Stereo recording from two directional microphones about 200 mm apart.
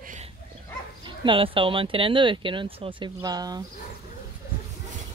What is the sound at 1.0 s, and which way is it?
Speech, 25° right (ahead or behind).